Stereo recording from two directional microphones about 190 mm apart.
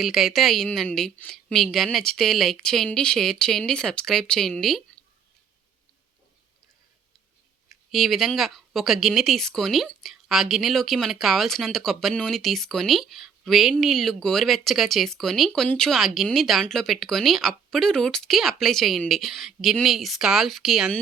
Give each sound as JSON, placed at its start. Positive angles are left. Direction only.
{"t": 0.0, "sound": "speech", "side_deg": 0}
{"t": 7.7, "sound": "speech", "side_deg": 0}